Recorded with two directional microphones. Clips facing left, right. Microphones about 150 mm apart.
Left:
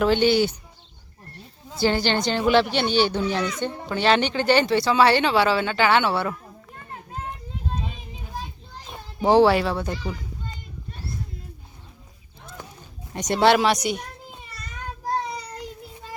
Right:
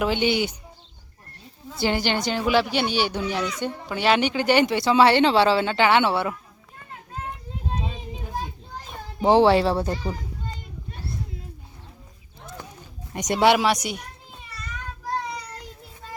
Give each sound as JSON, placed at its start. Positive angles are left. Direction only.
{"t": 0.0, "sound": "speech", "side_deg": -15}
{"t": 1.8, "sound": "speech", "side_deg": -15}
{"t": 9.2, "sound": "speech", "side_deg": -20}
{"t": 13.1, "sound": "speech", "side_deg": -15}